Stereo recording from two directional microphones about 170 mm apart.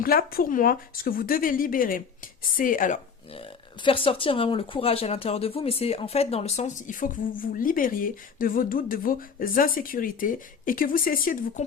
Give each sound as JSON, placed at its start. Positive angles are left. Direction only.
{"t": 0.0, "sound": "speech", "side_deg": 60}
{"t": 3.8, "sound": "speech", "side_deg": 30}